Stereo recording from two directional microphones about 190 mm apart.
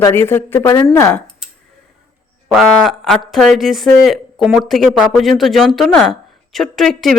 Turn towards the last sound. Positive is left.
turn(degrees=0)  # may be behind; listen again after turning